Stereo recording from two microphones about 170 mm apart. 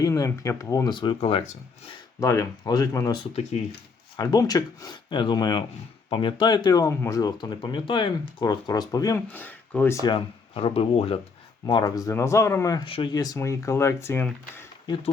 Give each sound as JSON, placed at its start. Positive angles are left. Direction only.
{"t": 0.0, "sound": "speech", "side_deg": 15}
{"t": 2.2, "sound": "speech", "side_deg": 20}
{"t": 4.2, "sound": "speech", "side_deg": 20}
{"t": 10.1, "sound": "speech", "side_deg": 35}
{"t": 11.6, "sound": "speech", "side_deg": 20}